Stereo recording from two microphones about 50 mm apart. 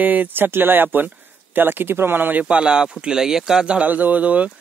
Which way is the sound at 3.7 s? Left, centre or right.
Right.